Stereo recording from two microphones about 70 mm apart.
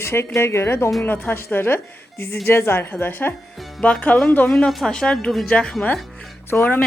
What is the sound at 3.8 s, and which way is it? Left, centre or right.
Speech, centre.